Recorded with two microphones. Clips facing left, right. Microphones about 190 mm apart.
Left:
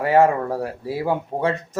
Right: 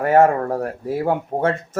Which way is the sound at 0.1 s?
45° right (ahead or behind).